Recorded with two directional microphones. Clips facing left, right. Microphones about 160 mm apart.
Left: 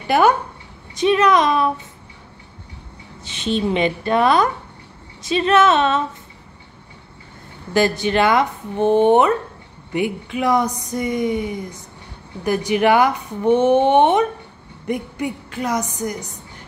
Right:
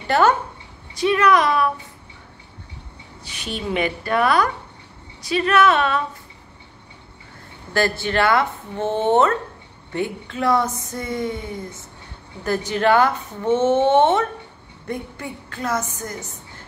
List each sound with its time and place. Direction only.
0.0 s a woman's voice: 15° left (ahead or behind)
3.3 s a woman's voice: 25° left (ahead or behind)
7.7 s speech: 15° left (ahead or behind)